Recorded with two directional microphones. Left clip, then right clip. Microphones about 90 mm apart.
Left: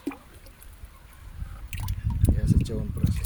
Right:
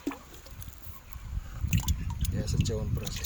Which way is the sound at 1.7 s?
15° right (ahead or behind).